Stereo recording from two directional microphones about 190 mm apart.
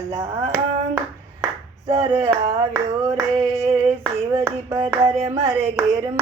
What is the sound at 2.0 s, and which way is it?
Hands, 20° right (ahead or behind).